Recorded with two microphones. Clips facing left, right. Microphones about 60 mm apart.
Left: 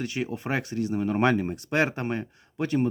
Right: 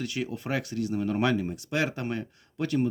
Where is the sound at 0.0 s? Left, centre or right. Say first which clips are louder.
Left 2 dB; left.